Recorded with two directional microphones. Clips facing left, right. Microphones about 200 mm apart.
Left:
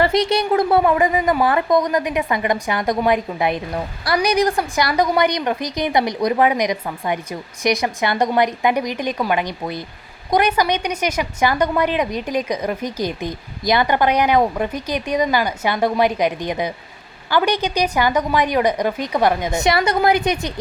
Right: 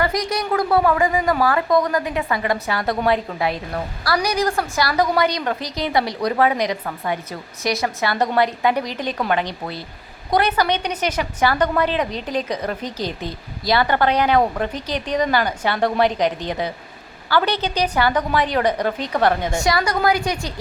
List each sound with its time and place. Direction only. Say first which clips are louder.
0.0 s a woman's voice: left 5 dB; 25° left (ahead or behind)